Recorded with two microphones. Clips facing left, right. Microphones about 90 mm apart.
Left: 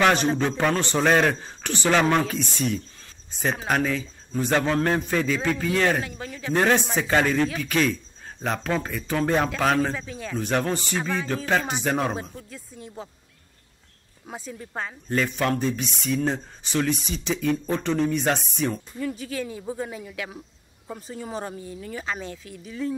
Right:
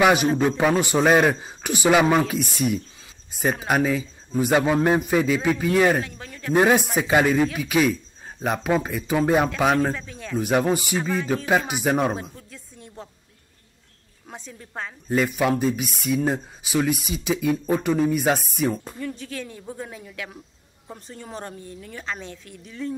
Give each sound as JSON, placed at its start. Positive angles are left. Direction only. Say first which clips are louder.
{"t": 0.0, "sound": "speech", "louder": "right 2 dB", "side_deg": -10}
{"t": 6.5, "sound": "speech", "louder": "right 3 dB", "side_deg": -10}
{"t": 10.4, "sound": "speech", "louder": "right 4 dB", "side_deg": -10}
{"t": 14.2, "sound": "speech", "louder": "left 4 dB", "side_deg": 5}
{"t": 15.0, "sound": "speech", "louder": "right 3 dB", "side_deg": -10}